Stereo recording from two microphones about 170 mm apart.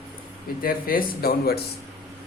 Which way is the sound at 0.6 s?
60° left (ahead or behind).